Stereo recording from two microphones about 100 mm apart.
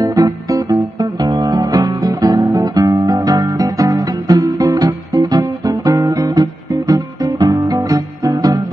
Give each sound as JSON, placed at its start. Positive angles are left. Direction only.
{"t": 0.0, "sound": "music", "side_deg": -35}